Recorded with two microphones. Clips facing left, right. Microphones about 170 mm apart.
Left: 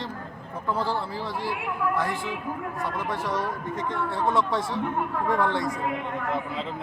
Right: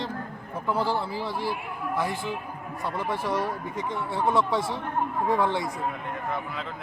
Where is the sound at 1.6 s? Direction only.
90° left.